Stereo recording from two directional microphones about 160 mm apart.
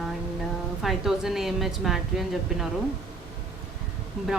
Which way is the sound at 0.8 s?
Centre (ahead or behind).